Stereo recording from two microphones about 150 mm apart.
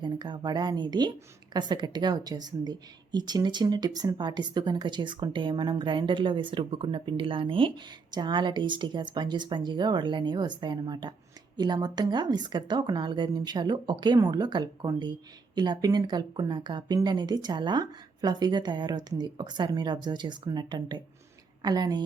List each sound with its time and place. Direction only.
0.0 s a woman's voice: 30° right (ahead or behind)